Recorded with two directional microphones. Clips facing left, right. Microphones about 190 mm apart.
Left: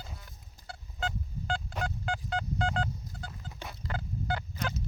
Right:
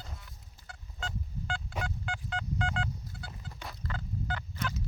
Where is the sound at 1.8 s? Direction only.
40° left (ahead or behind).